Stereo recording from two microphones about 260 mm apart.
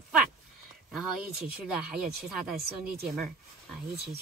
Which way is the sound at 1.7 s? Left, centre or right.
Centre.